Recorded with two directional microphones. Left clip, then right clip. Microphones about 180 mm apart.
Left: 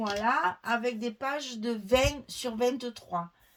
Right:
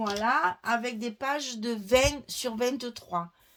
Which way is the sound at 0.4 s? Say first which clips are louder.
Right 1 dB; 45° right (ahead or behind).